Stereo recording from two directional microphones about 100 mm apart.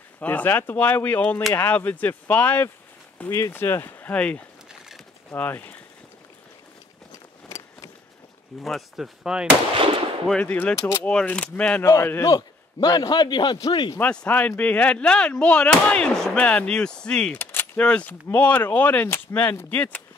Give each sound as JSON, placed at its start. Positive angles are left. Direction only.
{"t": 0.2, "sound": "speech", "side_deg": 15}
{"t": 4.1, "sound": "speech", "side_deg": 15}
{"t": 7.4, "sound": "a sound", "side_deg": 35}
{"t": 8.6, "sound": "speech", "side_deg": 0}
{"t": 10.4, "sound": "speech", "side_deg": 15}
{"t": 10.8, "sound": "speech", "side_deg": 30}
{"t": 11.1, "sound": "speech", "side_deg": 10}
{"t": 11.8, "sound": "a man's voice", "side_deg": 35}
{"t": 13.9, "sound": "speech", "side_deg": 15}